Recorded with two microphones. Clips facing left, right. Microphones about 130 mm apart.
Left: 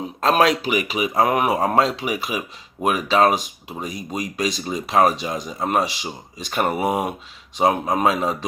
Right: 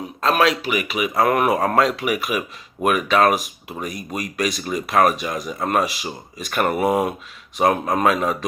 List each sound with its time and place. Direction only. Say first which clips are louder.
0.2 s speech: left 1 dB; 35° left (ahead or behind)
1.2 s speech: right 1 dB; 15° left (ahead or behind)
1.7 s speech: right 1 dB; 30° left (ahead or behind)